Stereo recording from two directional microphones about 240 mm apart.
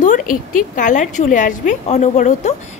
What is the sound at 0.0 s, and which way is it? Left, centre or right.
Speech, left.